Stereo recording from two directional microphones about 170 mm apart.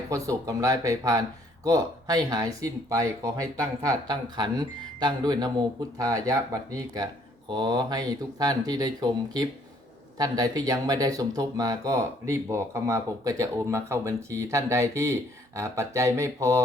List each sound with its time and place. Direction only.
0.3 s speech: 20° right (ahead or behind)